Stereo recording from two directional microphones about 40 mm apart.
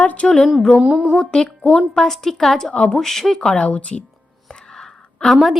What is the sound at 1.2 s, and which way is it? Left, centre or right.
Speech, centre.